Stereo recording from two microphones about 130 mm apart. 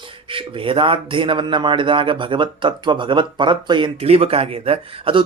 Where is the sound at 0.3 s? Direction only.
40° right (ahead or behind).